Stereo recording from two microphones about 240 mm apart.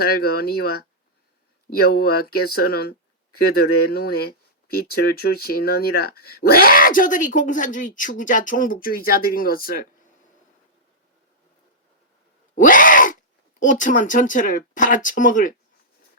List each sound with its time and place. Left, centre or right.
0.0 s speech: left
12.5 s a sound: left
13.6 s speech: left